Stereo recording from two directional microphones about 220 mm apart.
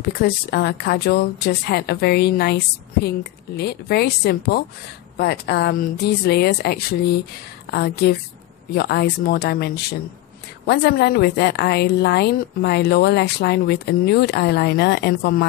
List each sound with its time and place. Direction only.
0.0 s a woman's voice: 45° left (ahead or behind)
10.7 s a woman's voice: 50° left (ahead or behind)